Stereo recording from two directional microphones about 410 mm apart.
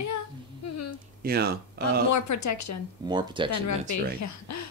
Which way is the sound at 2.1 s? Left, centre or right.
Left.